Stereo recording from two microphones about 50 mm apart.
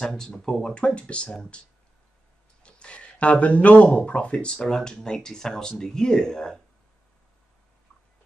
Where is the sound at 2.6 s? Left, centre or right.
Left.